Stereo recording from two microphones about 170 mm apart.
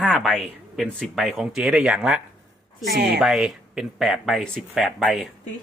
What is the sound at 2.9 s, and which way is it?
Speech, 75° right (ahead or behind).